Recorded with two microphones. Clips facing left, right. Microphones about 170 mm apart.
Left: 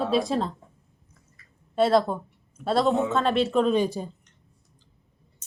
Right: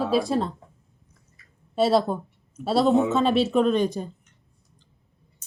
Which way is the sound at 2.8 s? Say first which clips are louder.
Right 6 dB; 20° right (ahead or behind).